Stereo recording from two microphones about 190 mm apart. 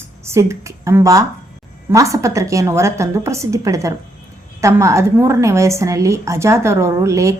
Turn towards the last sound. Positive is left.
turn(degrees=-15)  # may be behind; listen again after turning